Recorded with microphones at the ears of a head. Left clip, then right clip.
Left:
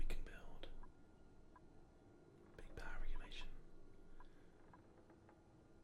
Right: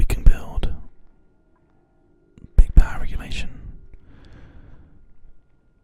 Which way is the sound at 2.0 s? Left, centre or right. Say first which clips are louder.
Right 14 dB; right.